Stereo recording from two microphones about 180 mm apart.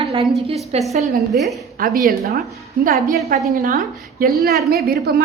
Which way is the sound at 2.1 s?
55° right (ahead or behind).